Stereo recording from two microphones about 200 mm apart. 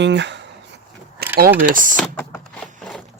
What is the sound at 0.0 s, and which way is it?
Speech, 60° right (ahead or behind).